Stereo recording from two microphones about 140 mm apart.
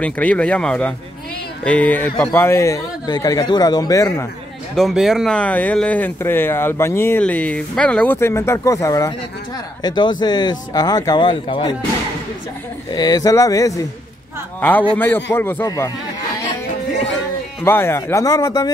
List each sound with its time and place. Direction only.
0.0 s speech: 10° left (ahead or behind)
4.7 s speech: centre (ahead or behind); by 11.7 s 35° left (ahead or behind)
12.9 s speech: 25° left (ahead or behind)
14.6 s speech: 10° left (ahead or behind)
17.6 s speech: 15° left (ahead or behind)